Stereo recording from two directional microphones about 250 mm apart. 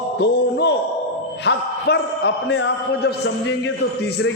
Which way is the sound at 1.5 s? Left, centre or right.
Left.